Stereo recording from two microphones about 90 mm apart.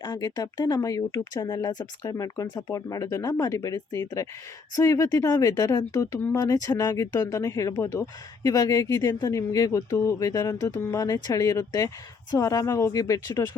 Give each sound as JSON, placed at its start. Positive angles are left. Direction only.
{"t": 0.0, "sound": "speech", "side_deg": 45}